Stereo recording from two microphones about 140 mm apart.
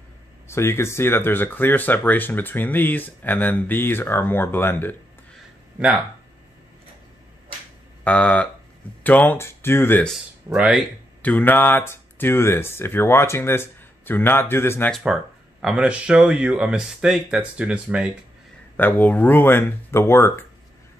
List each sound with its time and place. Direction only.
0.5 s speech: 20° left (ahead or behind)
8.0 s speech: 10° left (ahead or behind)
10.5 s speech: 5° right (ahead or behind)
11.2 s speech: 10° left (ahead or behind)
15.6 s speech: 5° right (ahead or behind)
18.8 s speech: 15° left (ahead or behind)